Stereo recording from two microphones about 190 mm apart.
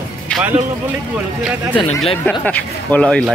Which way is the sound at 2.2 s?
5° left (ahead or behind).